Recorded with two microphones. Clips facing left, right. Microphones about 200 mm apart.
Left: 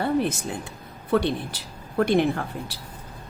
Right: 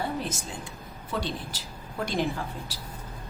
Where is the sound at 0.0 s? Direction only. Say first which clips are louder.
Left 8 dB; 60° left (ahead or behind).